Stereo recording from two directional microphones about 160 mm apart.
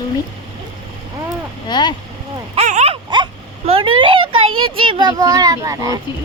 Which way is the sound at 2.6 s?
45° right (ahead or behind).